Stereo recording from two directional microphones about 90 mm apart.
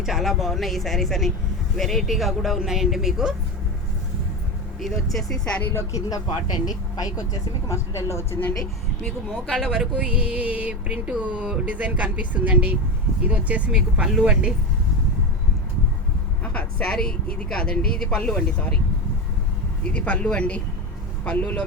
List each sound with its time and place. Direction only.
0.0 s speech: centre (ahead or behind)
5.1 s speech: 10° left (ahead or behind)
5.7 s speech: 40° left (ahead or behind)
7.7 s speech: 35° left (ahead or behind)
9.5 s speech: 5° right (ahead or behind)
16.4 s speech: 15° left (ahead or behind)
19.9 s speech: 15° left (ahead or behind)